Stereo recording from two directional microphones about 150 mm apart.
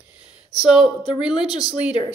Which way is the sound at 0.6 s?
5° right (ahead or behind).